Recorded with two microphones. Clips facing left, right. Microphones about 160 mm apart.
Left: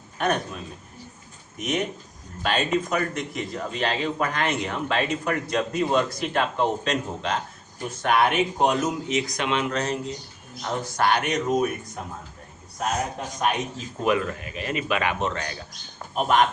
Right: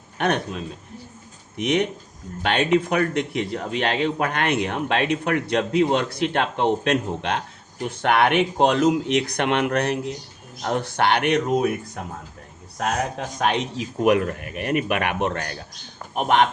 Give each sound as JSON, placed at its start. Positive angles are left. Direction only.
{"t": 0.2, "sound": "speech", "side_deg": -65}
{"t": 12.8, "sound": "speech", "side_deg": -85}